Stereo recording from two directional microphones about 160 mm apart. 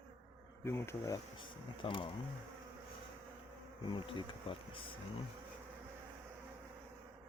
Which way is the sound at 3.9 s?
30° left (ahead or behind).